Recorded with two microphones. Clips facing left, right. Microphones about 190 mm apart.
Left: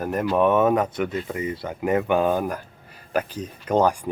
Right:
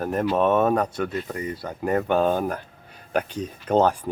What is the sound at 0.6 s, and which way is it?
Speech, 20° left (ahead or behind).